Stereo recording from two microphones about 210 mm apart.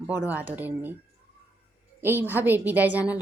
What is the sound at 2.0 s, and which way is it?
Speech, 10° right (ahead or behind).